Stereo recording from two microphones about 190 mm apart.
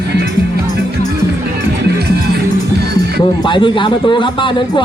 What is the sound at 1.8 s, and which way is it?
Music, 60° right (ahead or behind).